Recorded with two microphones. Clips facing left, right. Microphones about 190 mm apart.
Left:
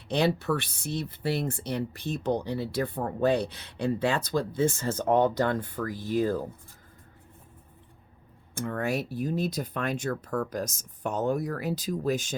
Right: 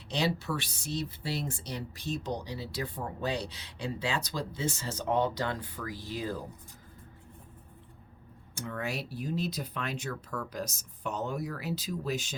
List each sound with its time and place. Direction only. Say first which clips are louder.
0.1 s speech: left 6 dB; 55° left (ahead or behind)
8.5 s speech: left 7 dB; 50° left (ahead or behind)